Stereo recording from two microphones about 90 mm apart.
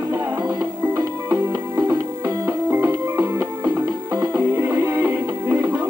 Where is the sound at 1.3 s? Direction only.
20° right (ahead or behind).